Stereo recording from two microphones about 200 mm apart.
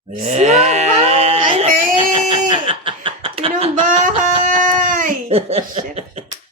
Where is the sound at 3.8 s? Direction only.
40° right (ahead or behind).